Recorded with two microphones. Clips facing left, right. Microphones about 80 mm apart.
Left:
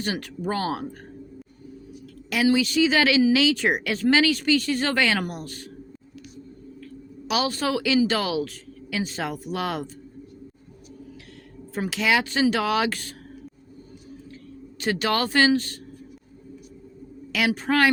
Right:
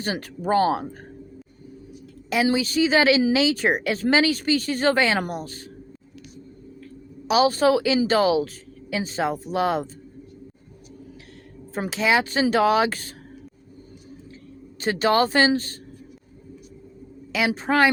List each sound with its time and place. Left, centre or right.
0.0 s speech: right
2.3 s speech: right
7.3 s speech: right
11.7 s speech: right
14.8 s speech: right
17.3 s speech: right